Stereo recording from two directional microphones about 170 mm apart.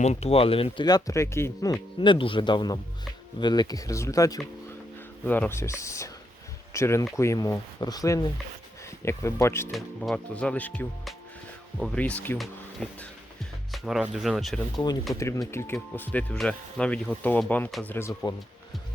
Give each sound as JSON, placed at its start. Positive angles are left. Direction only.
{"t": 0.0, "sound": "speech", "side_deg": 40}
{"t": 2.0, "sound": "speech", "side_deg": 30}
{"t": 9.7, "sound": "speech", "side_deg": 0}
{"t": 15.1, "sound": "speech", "side_deg": 20}